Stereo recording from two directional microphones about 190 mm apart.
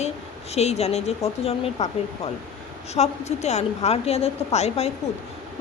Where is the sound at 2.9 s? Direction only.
35° left (ahead or behind).